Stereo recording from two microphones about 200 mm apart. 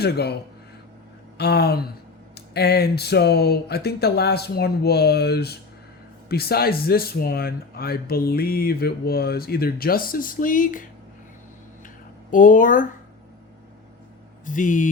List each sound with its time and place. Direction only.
0.0 s speech: 55° left (ahead or behind)
1.4 s speech: 55° left (ahead or behind)
12.3 s speech: 40° left (ahead or behind)
14.4 s speech: 40° left (ahead or behind)